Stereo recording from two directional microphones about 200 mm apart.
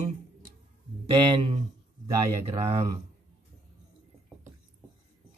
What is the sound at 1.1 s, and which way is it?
Speech, 25° right (ahead or behind).